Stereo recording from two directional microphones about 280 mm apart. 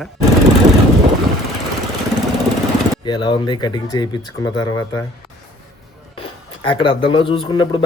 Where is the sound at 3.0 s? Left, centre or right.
Centre.